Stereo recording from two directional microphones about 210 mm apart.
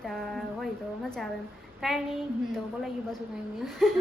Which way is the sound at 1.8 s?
Centre (ahead or behind).